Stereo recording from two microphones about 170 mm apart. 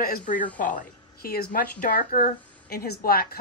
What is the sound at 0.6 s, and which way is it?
Speech, 50° left (ahead or behind).